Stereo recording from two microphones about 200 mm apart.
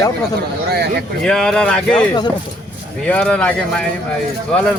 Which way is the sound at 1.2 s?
Centre (ahead or behind).